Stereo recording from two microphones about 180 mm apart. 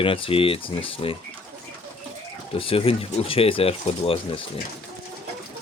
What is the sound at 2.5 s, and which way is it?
Speech, 30° left (ahead or behind).